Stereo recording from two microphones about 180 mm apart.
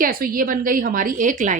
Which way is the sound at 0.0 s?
55° right (ahead or behind).